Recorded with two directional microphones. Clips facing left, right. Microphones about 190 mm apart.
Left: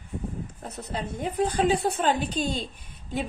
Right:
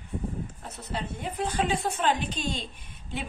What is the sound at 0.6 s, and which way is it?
A woman's voice, 40° left (ahead or behind).